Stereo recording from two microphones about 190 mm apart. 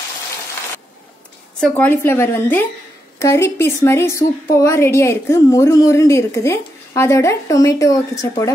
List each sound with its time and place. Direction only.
1.6 s a woman's voice: 10° left (ahead or behind)